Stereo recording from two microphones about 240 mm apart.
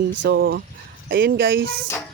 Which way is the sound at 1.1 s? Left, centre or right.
Right.